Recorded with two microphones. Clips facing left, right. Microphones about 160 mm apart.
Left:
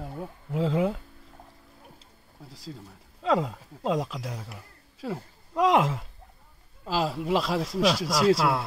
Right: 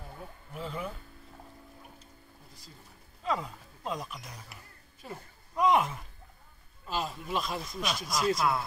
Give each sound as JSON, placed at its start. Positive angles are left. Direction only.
{"t": 0.0, "sound": "speech", "side_deg": 90}
{"t": 3.2, "sound": "speech", "side_deg": 90}